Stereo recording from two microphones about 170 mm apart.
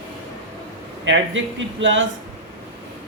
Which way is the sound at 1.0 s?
90° right.